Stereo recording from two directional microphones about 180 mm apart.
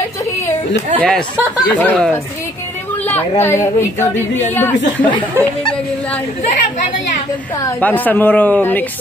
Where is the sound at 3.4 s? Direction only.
15° left (ahead or behind).